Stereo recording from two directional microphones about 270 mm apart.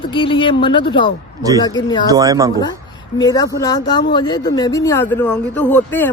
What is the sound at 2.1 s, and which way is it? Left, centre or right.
Speech, centre.